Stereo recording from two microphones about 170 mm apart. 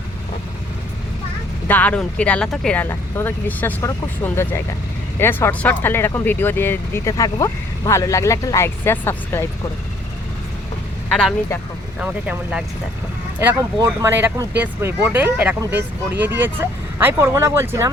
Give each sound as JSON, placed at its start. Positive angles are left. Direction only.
{"t": 1.6, "sound": "speech", "side_deg": 10}
{"t": 11.1, "sound": "speech", "side_deg": 5}
{"t": 11.9, "sound": "speech", "side_deg": -10}